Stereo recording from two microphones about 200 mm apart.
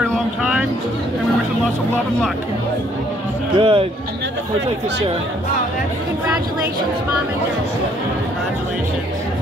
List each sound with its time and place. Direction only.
0.0 s music: centre (ahead or behind)
3.5 s speech: 25° right (ahead or behind)